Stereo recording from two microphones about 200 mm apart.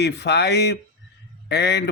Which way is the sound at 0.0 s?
60° left (ahead or behind).